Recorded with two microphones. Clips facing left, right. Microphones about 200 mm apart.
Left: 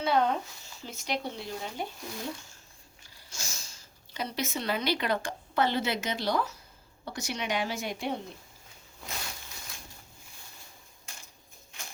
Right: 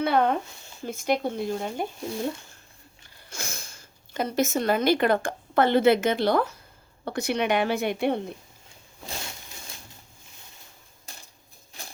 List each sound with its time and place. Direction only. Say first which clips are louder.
0.0 s speech: right 4 dB; 60° right (ahead or behind)
3.2 s a woman's voice: right 7 dB; 55° right (ahead or behind)
11.1 s a sound: right 3 dB; 35° right (ahead or behind)
11.7 s patter: right 3 dB; 35° right (ahead or behind)